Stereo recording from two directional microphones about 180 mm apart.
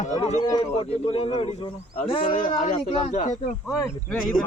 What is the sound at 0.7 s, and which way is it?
Speech, 30° left (ahead or behind).